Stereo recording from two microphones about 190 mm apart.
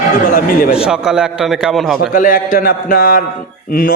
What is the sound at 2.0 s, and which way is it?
A man's voice, 45° left (ahead or behind).